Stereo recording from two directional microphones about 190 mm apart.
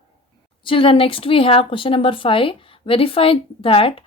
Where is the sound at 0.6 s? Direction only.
25° left (ahead or behind).